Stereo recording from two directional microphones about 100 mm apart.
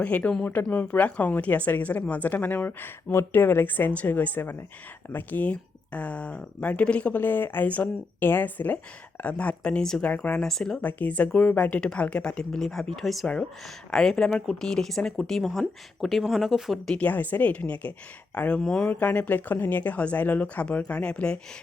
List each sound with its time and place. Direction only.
0.0 s a woman's voice: 15° left (ahead or behind)
17.0 s a woman's voice: 15° left (ahead or behind)
18.9 s a woman's voice: 15° left (ahead or behind)